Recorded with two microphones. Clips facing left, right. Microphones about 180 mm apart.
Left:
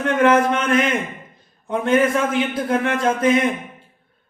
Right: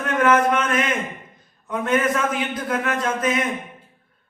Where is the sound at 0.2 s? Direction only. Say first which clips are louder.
Left 1 dB; 30° left (ahead or behind).